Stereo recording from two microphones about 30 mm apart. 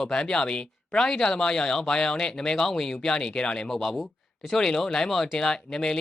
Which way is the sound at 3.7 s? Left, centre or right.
Centre.